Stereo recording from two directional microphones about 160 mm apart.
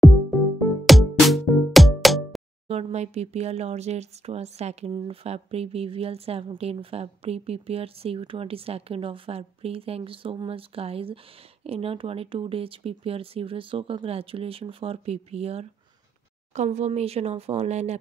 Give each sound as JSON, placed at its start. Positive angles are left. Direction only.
{"t": 0.0, "sound": "music", "side_deg": 0}
{"t": 2.7, "sound": "speech", "side_deg": -40}